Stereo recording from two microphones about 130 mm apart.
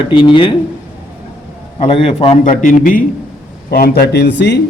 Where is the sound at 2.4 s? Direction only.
85° left.